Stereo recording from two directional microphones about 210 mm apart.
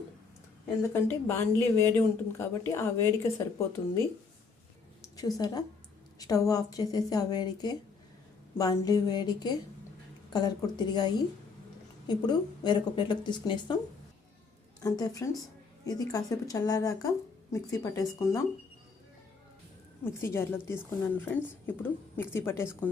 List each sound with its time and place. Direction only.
0.9 s speech: 10° left (ahead or behind)
5.4 s a woman's voice: 20° left (ahead or behind)
14.8 s speech: 15° left (ahead or behind)
20.1 s speech: 10° left (ahead or behind)